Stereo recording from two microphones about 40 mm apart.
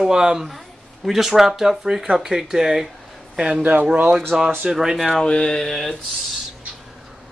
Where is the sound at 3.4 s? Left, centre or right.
Centre.